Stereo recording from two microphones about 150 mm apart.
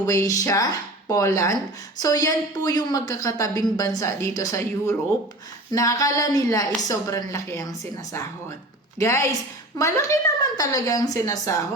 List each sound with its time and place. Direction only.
0.0 s a woman's voice: 20° left (ahead or behind)